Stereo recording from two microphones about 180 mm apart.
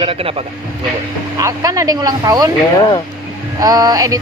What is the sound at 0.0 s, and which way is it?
Speech, 30° right (ahead or behind).